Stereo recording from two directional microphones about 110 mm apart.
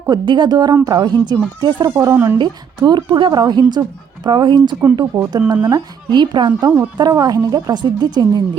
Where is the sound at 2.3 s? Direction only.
40° right (ahead or behind).